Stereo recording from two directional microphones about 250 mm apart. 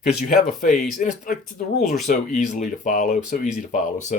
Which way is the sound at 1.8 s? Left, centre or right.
Centre.